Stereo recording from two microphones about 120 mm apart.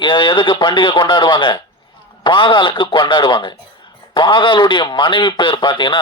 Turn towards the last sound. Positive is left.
turn(degrees=40)  # may be behind; listen again after turning